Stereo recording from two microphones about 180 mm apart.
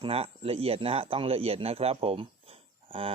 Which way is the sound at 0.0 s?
30° right (ahead or behind).